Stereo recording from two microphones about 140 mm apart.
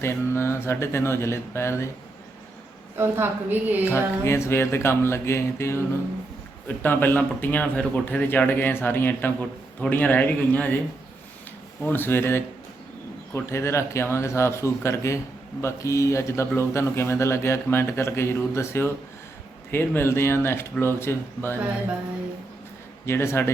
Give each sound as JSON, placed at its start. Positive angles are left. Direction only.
{"t": 0.0, "sound": "speech", "side_deg": 15}
{"t": 3.0, "sound": "a woman's voice", "side_deg": -15}
{"t": 4.2, "sound": "a man's voice", "side_deg": 20}
{"t": 11.8, "sound": "a man's voice", "side_deg": 15}
{"t": 23.0, "sound": "a man's voice", "side_deg": 20}